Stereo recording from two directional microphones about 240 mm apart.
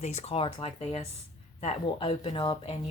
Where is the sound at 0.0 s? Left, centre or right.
Left.